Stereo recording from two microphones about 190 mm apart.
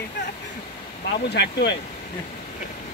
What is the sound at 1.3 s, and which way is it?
Speech, 65° left (ahead or behind).